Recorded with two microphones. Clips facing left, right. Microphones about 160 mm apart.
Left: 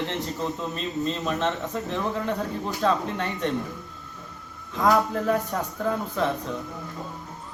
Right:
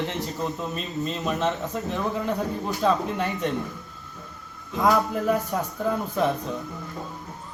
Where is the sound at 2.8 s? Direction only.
5° right (ahead or behind).